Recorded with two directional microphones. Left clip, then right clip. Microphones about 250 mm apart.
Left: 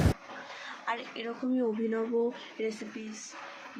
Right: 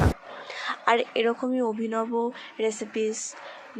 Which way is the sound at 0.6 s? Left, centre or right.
Right.